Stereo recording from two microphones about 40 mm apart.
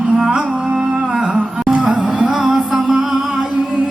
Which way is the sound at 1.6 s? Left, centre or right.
Right.